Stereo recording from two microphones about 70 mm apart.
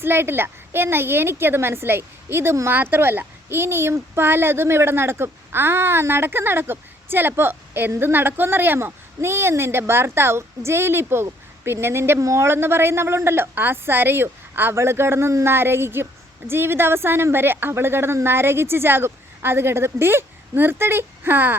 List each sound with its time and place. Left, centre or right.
0.0 s a woman's voice: right
12.2 s speech: right
12.5 s a woman's voice: right
15.4 s a woman's voice: right